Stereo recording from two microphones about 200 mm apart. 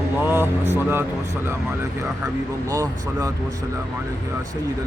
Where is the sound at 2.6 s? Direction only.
15° right (ahead or behind).